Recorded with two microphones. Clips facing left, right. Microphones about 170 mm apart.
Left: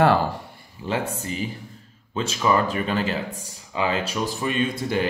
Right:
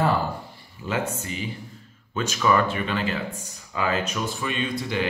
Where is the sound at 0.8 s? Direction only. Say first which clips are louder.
Left 1 dB; 35° left (ahead or behind).